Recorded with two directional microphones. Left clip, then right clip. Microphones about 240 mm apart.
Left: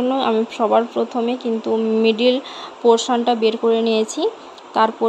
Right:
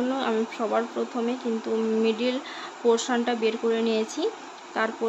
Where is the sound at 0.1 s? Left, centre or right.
Centre.